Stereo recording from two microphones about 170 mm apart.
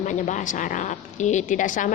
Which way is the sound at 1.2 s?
45° left (ahead or behind).